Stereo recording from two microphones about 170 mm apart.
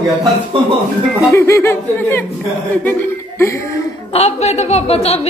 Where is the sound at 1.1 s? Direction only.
15° left (ahead or behind).